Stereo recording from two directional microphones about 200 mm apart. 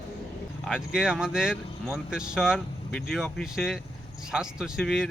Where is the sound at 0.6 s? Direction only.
5° right (ahead or behind).